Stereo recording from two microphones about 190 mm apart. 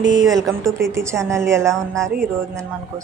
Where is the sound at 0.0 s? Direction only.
75° right (ahead or behind).